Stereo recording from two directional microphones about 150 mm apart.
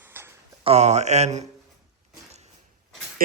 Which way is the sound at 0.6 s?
45° right (ahead or behind).